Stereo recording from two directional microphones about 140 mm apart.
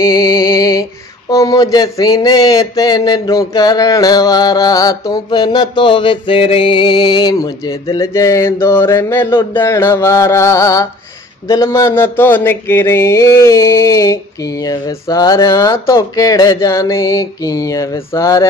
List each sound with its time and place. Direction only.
0.1 s speech: 25° left (ahead or behind)